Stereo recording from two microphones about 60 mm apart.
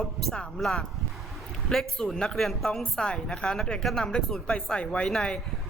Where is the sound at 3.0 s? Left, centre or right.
Centre.